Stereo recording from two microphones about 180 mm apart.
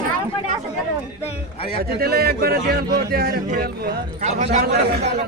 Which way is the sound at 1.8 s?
60° right (ahead or behind).